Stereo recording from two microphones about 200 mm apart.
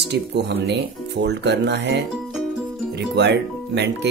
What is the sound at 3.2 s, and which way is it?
Speech, 60° right (ahead or behind).